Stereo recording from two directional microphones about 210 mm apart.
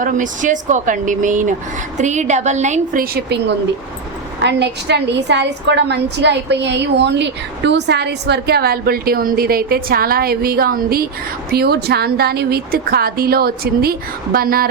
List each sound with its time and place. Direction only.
0.0 s speech: 35° right (ahead or behind)
4.4 s a woman's voice: 55° right (ahead or behind)